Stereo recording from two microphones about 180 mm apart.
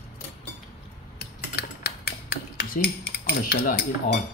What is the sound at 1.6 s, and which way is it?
Cutlery, 65° left (ahead or behind).